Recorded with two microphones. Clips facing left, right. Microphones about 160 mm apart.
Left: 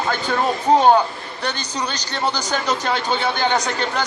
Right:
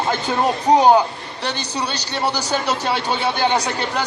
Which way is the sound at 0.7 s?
15° right (ahead or behind).